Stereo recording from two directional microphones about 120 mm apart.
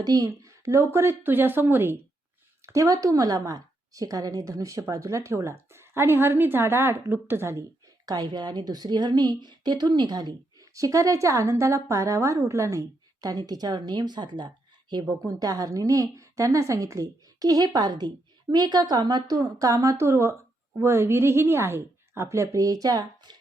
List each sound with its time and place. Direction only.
0.0 s a woman's voice: 30° right (ahead or behind)
8.0 s a woman's voice: 35° right (ahead or behind)